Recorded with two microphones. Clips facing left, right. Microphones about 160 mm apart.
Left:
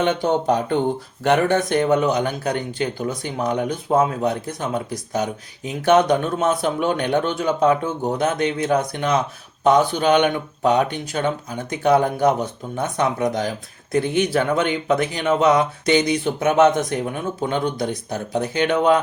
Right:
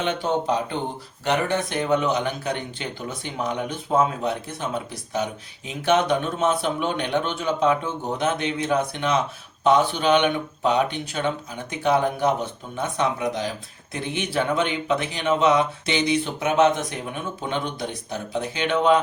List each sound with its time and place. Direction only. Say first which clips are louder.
0.0 s speech: left 5 dB; 45° left (ahead or behind)